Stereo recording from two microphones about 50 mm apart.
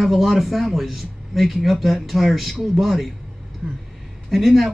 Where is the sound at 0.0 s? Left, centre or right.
Centre.